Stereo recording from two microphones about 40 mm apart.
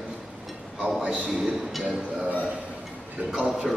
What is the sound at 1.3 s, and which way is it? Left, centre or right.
Speech, centre.